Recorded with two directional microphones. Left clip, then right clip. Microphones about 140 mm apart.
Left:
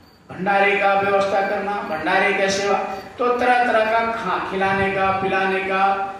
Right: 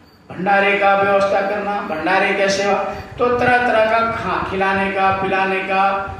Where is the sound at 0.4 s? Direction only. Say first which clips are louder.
Right 3 dB; 25° right (ahead or behind).